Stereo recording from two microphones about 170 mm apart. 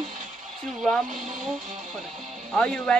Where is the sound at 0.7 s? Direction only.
Centre (ahead or behind).